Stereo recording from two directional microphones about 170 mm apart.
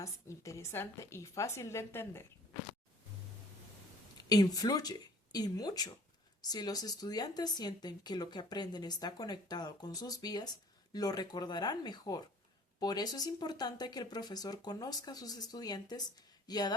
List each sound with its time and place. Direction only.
0.0 s a woman's voice: 20° left (ahead or behind)
4.2 s speech: 20° left (ahead or behind)